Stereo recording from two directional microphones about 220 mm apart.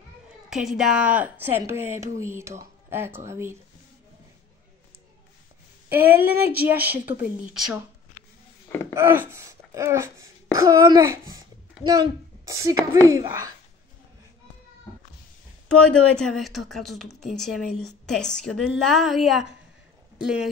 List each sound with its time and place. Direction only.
0.5 s speech: centre (ahead or behind)
5.9 s speech: 10° right (ahead or behind)
8.9 s speech: 10° right (ahead or behind)
15.7 s speech: 5° left (ahead or behind)